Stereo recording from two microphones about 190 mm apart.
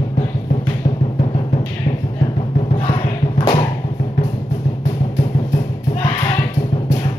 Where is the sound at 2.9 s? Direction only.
25° left (ahead or behind).